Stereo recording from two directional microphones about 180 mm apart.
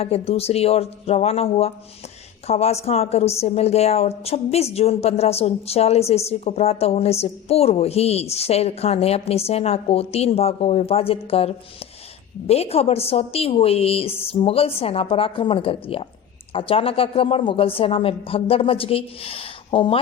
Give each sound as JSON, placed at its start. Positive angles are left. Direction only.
{"t": 0.0, "sound": "speech", "side_deg": 35}